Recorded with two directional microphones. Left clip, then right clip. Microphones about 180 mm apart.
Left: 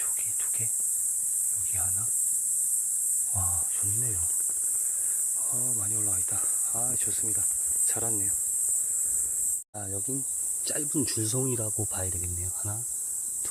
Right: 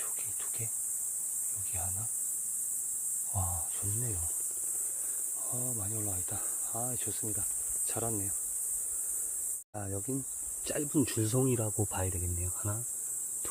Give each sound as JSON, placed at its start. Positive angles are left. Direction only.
{"t": 3.3, "sound": "cricket", "side_deg": 0}
{"t": 5.6, "sound": "cricket", "side_deg": 0}
{"t": 6.3, "sound": "speech", "side_deg": -15}
{"t": 9.7, "sound": "speech", "side_deg": -5}